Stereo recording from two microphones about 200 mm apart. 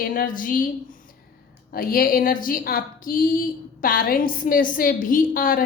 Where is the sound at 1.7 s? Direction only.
45° left (ahead or behind).